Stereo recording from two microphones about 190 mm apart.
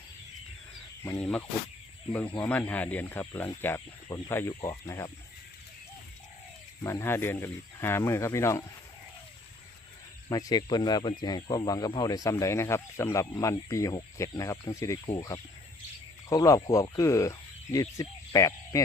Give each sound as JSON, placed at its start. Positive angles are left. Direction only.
{"t": 1.0, "sound": "speech", "side_deg": 10}
{"t": 6.8, "sound": "speech", "side_deg": 10}
{"t": 10.2, "sound": "speech", "side_deg": 20}
{"t": 16.3, "sound": "speech", "side_deg": 20}